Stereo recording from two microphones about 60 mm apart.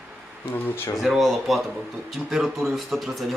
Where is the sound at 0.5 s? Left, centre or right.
Left.